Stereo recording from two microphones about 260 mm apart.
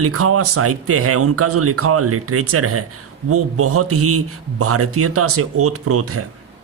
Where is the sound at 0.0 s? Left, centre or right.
Right.